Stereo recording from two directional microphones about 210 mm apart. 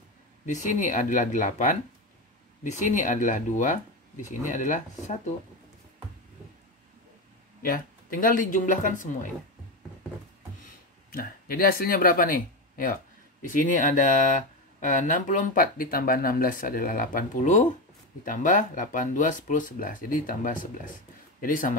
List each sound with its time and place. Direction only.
0.5 s speech: 35° left (ahead or behind)
7.6 s speech: 40° left (ahead or behind)
11.1 s speech: 45° left (ahead or behind)